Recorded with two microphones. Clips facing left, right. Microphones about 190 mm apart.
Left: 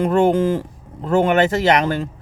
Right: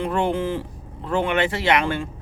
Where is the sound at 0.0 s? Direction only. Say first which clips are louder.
Left 7 dB; 45° left (ahead or behind).